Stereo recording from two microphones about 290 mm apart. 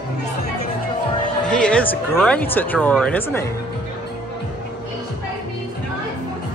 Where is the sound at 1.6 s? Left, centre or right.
Centre.